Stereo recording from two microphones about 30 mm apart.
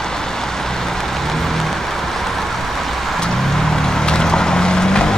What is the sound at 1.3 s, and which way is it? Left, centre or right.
Vehicle, centre.